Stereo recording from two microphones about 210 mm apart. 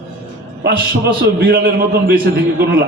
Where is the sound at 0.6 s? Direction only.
50° right (ahead or behind).